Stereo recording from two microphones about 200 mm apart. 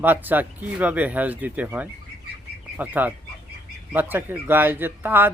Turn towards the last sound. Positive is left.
turn(degrees=-10)  # may be behind; listen again after turning